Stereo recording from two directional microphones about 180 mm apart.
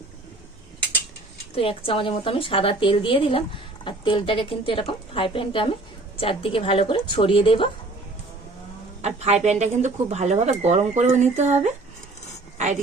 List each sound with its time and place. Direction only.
1.5 s a woman's voice: 30° left (ahead or behind)
9.0 s speech: 40° right (ahead or behind)